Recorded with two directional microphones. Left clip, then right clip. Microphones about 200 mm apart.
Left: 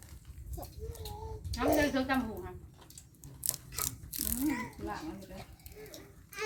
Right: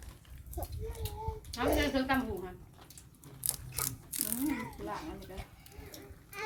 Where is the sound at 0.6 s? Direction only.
15° right (ahead or behind).